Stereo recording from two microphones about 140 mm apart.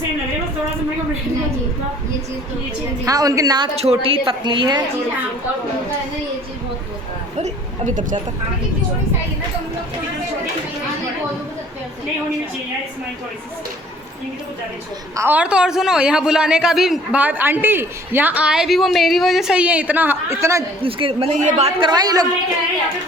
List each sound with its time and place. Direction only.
3.1 s a woman's voice: 25° right (ahead or behind)
3.8 s a woman's voice: 45° right (ahead or behind)
7.3 s a woman's voice: 55° right (ahead or behind)
15.1 s a man's voice: 15° right (ahead or behind)
20.8 s a woman's voice: 40° right (ahead or behind)
21.3 s a woman's voice: 55° right (ahead or behind)
21.8 s a woman's voice: 30° right (ahead or behind)